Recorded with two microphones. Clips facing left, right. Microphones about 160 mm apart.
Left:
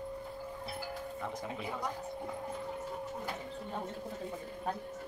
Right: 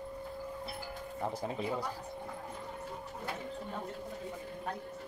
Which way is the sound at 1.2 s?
35° right (ahead or behind).